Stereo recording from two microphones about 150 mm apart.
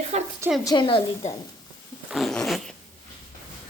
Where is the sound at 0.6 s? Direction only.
30° left (ahead or behind).